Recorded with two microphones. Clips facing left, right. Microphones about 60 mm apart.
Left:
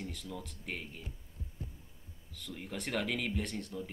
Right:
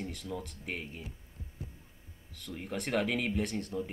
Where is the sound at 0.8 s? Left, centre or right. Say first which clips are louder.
Right 3 dB; centre.